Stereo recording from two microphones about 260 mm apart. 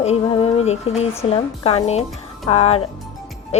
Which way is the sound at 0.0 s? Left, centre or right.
Left.